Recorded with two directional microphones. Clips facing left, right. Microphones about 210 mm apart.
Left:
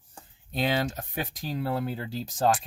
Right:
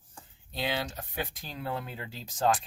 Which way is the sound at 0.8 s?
45° left (ahead or behind).